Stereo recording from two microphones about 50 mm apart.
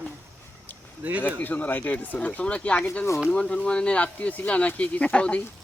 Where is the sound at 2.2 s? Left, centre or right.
Left.